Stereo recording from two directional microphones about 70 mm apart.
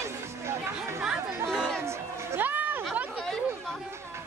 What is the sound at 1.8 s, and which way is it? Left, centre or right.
Music, right.